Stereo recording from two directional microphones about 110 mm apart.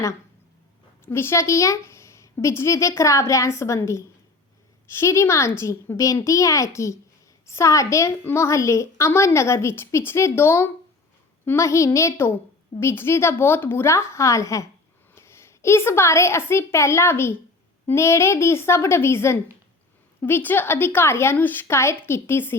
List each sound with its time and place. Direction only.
1.0 s a woman's voice: 20° left (ahead or behind)